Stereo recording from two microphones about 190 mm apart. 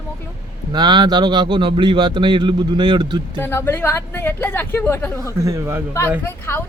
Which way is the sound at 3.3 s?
10° left (ahead or behind).